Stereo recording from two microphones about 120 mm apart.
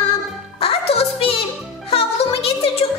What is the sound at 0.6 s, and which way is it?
Music, 55° left (ahead or behind).